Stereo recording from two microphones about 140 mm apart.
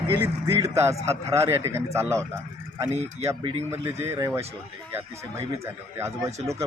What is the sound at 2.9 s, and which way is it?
Speech, 50° right (ahead or behind).